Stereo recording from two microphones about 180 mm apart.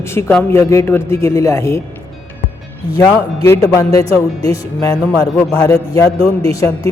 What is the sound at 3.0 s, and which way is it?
Speech, 15° left (ahead or behind).